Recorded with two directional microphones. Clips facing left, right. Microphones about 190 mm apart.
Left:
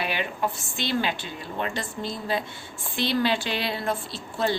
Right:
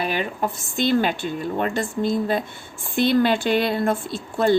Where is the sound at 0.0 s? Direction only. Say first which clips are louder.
Right 4 dB; 45° right (ahead or behind).